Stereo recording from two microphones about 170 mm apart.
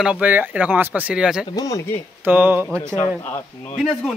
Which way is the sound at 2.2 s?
10° right (ahead or behind).